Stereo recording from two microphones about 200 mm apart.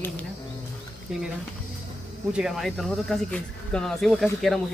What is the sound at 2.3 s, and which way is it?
Speech, centre (ahead or behind).